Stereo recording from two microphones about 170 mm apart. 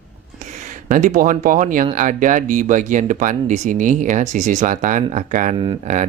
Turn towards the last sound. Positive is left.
turn(degrees=-45)  # may be behind; listen again after turning